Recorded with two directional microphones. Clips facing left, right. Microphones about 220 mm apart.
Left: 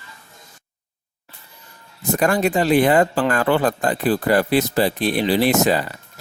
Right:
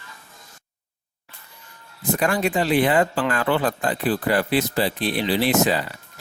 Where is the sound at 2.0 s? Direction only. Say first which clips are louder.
Left 3 dB; 45° left (ahead or behind).